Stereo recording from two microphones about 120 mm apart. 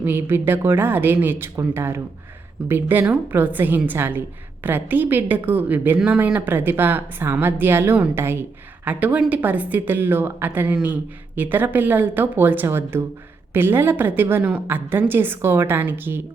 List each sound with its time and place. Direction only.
0.0 s a woman's voice: 15° right (ahead or behind)